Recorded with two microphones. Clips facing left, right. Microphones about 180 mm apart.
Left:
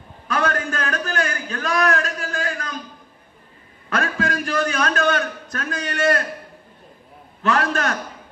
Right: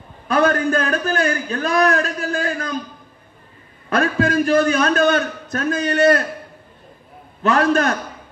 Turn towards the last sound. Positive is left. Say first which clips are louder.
# right 5 dB
turn(degrees=-20)  # may be behind; listen again after turning